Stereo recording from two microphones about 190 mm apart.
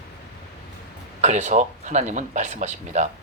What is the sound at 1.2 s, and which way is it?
Speech, 35° right (ahead or behind).